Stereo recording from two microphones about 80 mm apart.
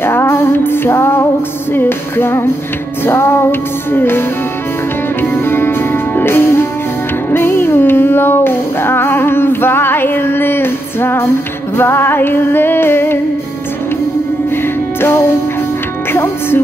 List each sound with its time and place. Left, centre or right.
0.0 s music: left
5.2 s music: left
15.0 s music: left
16.1 s speech: left